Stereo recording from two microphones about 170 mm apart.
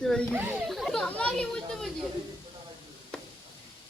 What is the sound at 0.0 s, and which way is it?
Speech, 5° left (ahead or behind).